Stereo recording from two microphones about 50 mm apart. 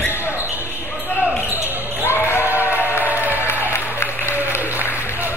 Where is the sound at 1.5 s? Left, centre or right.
Left.